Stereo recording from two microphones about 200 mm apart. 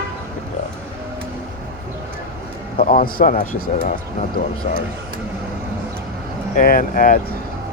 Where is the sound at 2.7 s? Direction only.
45° left (ahead or behind).